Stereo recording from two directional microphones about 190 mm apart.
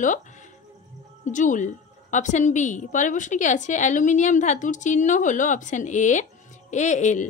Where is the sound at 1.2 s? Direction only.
40° left (ahead or behind).